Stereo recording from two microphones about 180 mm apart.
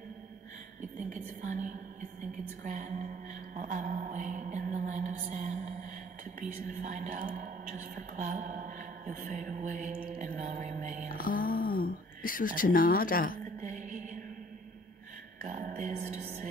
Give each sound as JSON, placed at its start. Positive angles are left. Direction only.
{"t": 0.9, "sound": "a woman's voice", "side_deg": -45}
{"t": 3.5, "sound": "music", "side_deg": -45}
{"t": 6.5, "sound": "a woman's voice", "side_deg": -45}
{"t": 11.1, "sound": "speech", "side_deg": 50}
{"t": 13.6, "sound": "music", "side_deg": -45}
{"t": 15.4, "sound": "music", "side_deg": -45}